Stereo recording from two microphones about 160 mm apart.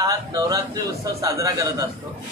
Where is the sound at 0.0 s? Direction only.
20° right (ahead or behind).